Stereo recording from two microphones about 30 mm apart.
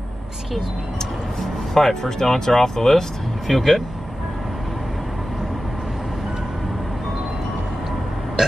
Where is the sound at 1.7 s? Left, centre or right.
Centre.